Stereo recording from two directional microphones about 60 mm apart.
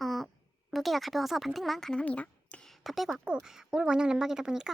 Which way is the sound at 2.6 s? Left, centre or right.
Centre.